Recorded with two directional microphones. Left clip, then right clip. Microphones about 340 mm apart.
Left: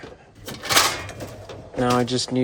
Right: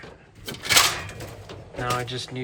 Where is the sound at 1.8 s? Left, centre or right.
Centre.